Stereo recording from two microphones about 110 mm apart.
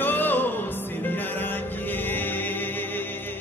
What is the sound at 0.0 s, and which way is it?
Music, 15° left (ahead or behind).